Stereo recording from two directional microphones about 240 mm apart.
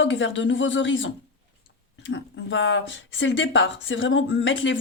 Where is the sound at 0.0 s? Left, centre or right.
Left.